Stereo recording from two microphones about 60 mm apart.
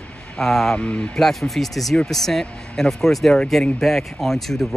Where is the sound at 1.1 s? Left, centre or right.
Centre.